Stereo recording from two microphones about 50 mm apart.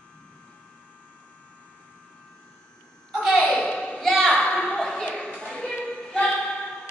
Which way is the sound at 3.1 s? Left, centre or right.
Centre.